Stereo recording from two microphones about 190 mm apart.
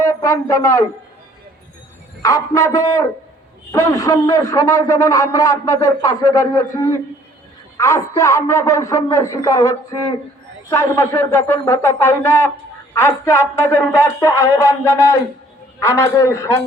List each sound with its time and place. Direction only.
0.0 s a man's voice: 15° left (ahead or behind)
2.2 s a man's voice: 15° left (ahead or behind)